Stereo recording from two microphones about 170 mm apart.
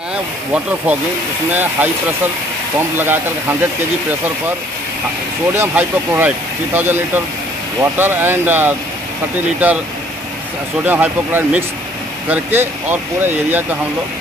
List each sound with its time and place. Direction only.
0.9 s speech: 10° right (ahead or behind)
3.0 s speech: 10° right (ahead or behind)
5.5 s speech: 10° right (ahead or behind)
10.9 s speech: 10° right (ahead or behind)